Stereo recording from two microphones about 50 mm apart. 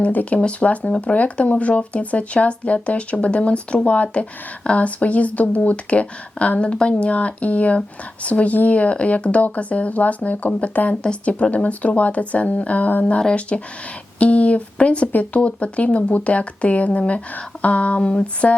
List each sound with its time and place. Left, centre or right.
0.1 s speech: left
0.3 s speech: left
13.1 s speech: left